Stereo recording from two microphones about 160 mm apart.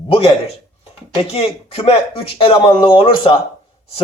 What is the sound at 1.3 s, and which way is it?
A man's voice, 40° left (ahead or behind).